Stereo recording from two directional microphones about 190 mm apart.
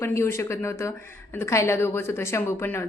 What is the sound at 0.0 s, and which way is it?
Speech, 15° left (ahead or behind).